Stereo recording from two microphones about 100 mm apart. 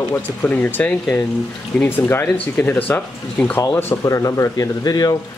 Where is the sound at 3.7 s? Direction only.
30° left (ahead or behind).